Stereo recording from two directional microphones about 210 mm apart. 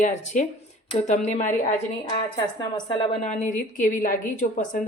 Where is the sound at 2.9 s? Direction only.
30° left (ahead or behind).